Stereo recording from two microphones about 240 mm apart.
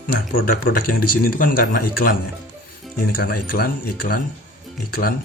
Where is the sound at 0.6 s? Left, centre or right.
Left.